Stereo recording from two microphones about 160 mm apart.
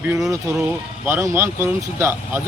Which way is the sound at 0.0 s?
10° right (ahead or behind).